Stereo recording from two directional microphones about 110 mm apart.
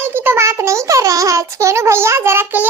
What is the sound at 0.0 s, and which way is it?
A child's voice, 20° right (ahead or behind).